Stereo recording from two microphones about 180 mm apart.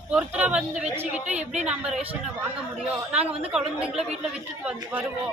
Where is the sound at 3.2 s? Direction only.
35° right (ahead or behind).